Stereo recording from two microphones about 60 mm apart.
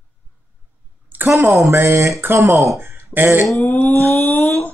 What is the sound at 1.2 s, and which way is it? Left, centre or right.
Speech, right.